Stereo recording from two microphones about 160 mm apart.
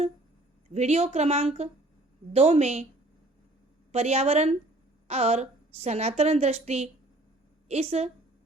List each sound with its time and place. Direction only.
0.7 s a woman's voice: 45° right (ahead or behind)
3.9 s a woman's voice: 40° right (ahead or behind)